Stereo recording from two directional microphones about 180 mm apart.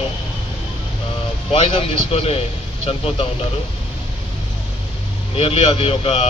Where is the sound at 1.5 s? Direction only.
30° left (ahead or behind).